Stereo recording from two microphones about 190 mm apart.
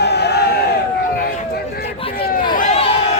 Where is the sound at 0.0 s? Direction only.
60° left (ahead or behind).